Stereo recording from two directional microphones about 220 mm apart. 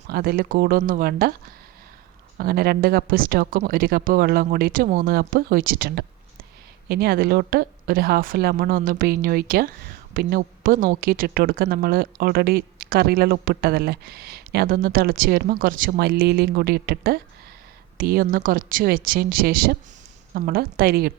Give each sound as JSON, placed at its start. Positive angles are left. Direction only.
{"t": 0.1, "sound": "speech", "side_deg": -45}
{"t": 2.4, "sound": "a woman's voice", "side_deg": -45}